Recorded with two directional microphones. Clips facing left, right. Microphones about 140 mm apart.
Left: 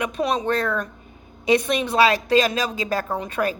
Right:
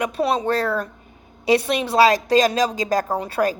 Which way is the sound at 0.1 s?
30° right (ahead or behind).